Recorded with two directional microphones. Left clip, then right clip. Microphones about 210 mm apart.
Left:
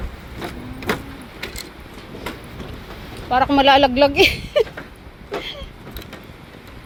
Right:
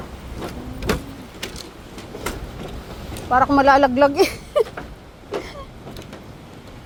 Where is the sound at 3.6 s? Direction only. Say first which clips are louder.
Left 2 dB; 15° left (ahead or behind).